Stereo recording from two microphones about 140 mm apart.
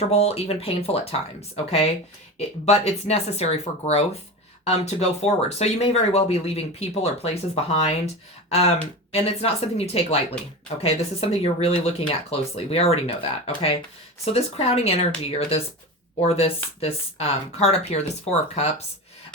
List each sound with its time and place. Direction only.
0.0 s speech: 50° left (ahead or behind)